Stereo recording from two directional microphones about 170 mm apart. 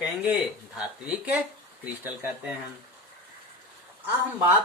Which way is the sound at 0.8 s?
5° right (ahead or behind).